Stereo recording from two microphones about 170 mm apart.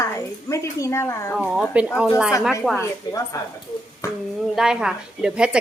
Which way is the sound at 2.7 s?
20° left (ahead or behind).